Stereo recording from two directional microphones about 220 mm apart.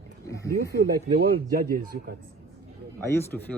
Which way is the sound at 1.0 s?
40° right (ahead or behind).